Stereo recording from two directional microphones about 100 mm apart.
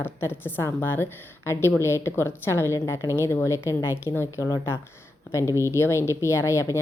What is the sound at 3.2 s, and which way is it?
A woman's voice, 30° left (ahead or behind).